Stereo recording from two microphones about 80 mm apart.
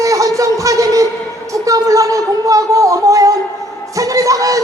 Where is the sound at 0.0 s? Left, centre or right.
Right.